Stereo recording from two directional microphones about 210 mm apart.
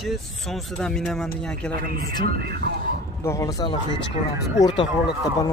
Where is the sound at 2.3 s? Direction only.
45° right (ahead or behind).